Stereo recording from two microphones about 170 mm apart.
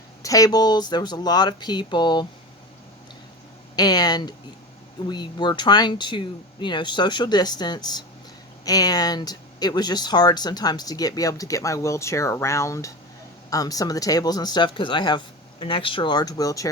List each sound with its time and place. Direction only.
0.2 s speech: 20° left (ahead or behind)
3.8 s speech: 25° left (ahead or behind)